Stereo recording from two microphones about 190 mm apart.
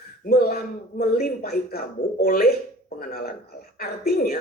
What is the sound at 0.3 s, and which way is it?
Speech, 50° left (ahead or behind).